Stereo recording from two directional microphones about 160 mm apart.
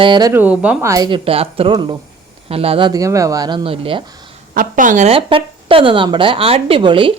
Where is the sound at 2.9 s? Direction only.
20° right (ahead or behind).